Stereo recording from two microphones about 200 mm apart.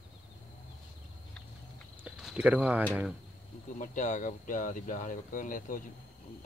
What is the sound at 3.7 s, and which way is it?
Speech, 40° left (ahead or behind).